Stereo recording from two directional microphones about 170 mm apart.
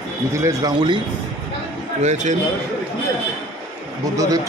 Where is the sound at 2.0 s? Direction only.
40° right (ahead or behind).